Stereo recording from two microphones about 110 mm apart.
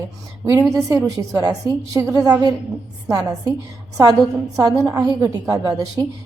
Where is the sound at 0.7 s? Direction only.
30° right (ahead or behind).